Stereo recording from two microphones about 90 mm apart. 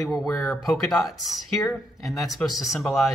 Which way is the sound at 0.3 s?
35° left (ahead or behind).